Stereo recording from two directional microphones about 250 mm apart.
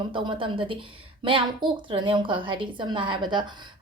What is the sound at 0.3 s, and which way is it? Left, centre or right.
A woman's voice, centre.